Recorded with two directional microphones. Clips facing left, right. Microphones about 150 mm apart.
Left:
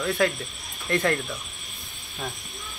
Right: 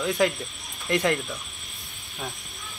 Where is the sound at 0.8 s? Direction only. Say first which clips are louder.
Even; 15° right (ahead or behind).